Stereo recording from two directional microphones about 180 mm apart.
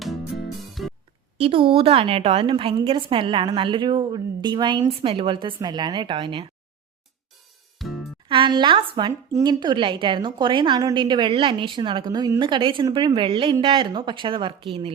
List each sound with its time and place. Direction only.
0.0 s music: centre (ahead or behind)
1.4 s speech: 30° right (ahead or behind)
7.8 s music: centre (ahead or behind)
8.3 s speech: 25° right (ahead or behind)